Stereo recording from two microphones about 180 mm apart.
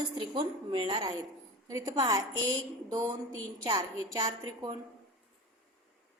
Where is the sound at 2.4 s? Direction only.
90° right.